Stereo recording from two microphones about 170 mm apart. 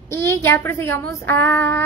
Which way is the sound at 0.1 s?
15° left (ahead or behind).